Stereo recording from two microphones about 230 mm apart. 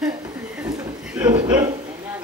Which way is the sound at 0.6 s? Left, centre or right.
Centre.